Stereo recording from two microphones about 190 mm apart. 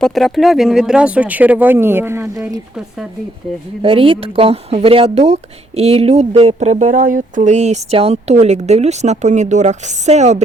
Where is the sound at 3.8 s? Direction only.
30° right (ahead or behind).